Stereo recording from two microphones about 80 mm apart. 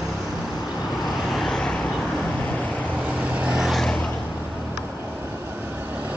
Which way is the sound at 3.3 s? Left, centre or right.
Centre.